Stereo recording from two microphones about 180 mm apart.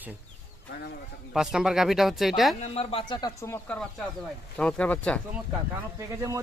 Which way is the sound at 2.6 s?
35° left (ahead or behind).